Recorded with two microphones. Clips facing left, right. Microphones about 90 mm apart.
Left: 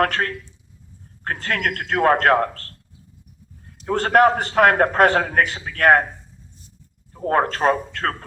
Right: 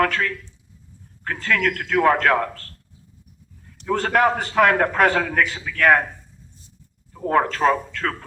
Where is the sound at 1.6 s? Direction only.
35° left (ahead or behind).